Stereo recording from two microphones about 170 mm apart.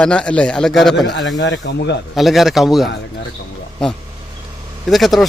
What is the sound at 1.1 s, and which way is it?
Speech, 90° left.